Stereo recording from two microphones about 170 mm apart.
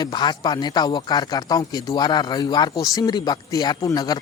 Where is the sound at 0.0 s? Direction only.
25° left (ahead or behind).